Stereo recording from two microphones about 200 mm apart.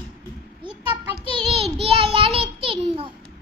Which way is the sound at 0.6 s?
25° right (ahead or behind).